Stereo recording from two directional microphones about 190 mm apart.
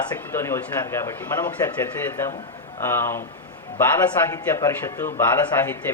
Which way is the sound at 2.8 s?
15° left (ahead or behind).